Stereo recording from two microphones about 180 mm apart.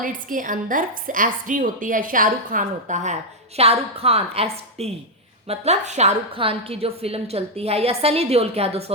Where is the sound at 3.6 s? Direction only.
35° right (ahead or behind).